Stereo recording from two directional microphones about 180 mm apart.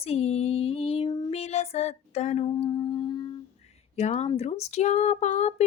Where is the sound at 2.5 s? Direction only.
25° left (ahead or behind).